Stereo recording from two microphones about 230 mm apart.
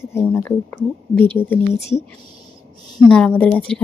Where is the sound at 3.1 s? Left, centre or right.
Centre.